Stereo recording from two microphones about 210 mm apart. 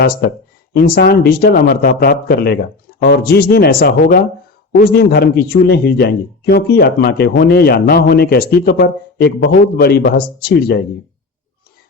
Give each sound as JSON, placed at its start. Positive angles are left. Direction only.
{"t": 0.7, "sound": "speech", "side_deg": 45}